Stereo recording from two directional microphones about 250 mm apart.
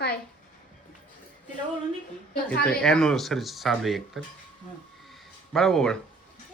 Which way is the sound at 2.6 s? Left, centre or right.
Centre.